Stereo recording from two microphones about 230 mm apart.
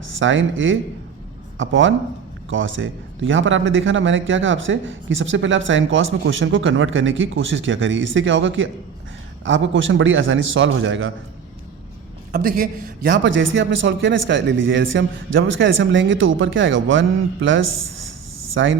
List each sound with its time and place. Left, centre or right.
0.2 s a man's voice: right
12.3 s a man's voice: right
13.2 s a man's voice: right